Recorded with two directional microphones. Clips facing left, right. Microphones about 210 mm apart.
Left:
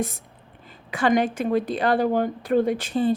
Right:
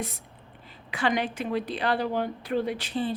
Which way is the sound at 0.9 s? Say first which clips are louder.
Left 6 dB; 45° left (ahead or behind).